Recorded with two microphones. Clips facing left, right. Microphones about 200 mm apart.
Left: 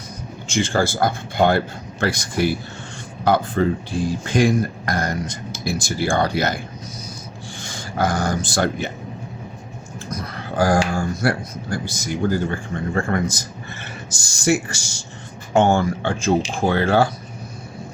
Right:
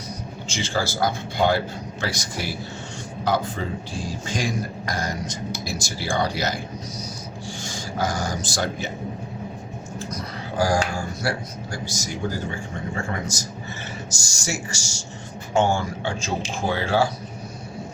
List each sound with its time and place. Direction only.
0.4 s speech: 50° left (ahead or behind)
7.6 s speech: 55° left (ahead or behind)
10.6 s speech: 55° left (ahead or behind)